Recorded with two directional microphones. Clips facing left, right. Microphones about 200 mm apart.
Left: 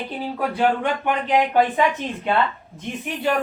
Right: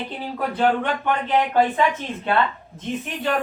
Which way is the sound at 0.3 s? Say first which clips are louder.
Right 1 dB; 10° left (ahead or behind).